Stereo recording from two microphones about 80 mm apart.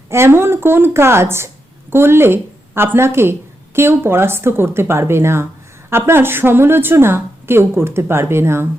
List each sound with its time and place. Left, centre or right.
0.1 s a woman's voice: right